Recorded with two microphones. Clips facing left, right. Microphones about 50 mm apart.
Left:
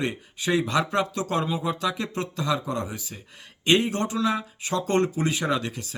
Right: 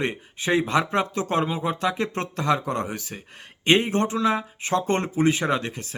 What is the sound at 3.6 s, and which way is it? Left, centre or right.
Speech, right.